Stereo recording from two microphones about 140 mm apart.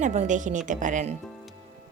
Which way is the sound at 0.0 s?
60° right (ahead or behind).